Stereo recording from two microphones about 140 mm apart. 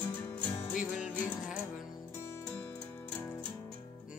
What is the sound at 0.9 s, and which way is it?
Music, 5° right (ahead or behind).